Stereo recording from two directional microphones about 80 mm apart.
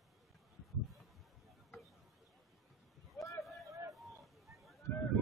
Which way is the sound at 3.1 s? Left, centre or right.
Left.